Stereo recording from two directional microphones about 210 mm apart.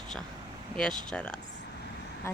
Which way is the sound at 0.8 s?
5° left (ahead or behind).